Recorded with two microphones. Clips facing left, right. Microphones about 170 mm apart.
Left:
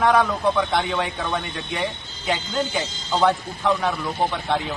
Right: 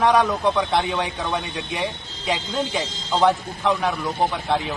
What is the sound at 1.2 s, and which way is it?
Speech, 15° right (ahead or behind).